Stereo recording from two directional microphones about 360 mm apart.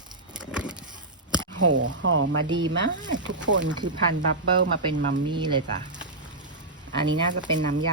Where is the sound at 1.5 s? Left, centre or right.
Right.